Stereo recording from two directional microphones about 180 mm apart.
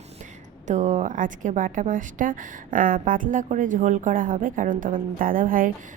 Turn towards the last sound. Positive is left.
turn(degrees=-50)  # may be behind; listen again after turning